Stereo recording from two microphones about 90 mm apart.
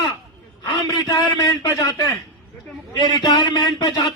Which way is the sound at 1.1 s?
55° left (ahead or behind).